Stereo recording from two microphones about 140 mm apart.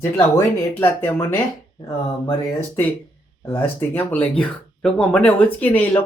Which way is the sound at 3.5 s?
15° left (ahead or behind).